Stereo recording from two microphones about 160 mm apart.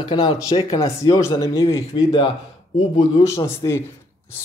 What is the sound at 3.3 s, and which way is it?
Speech, 15° left (ahead or behind).